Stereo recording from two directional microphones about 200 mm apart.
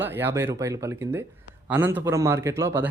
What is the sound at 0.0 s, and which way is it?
Speech, 10° right (ahead or behind).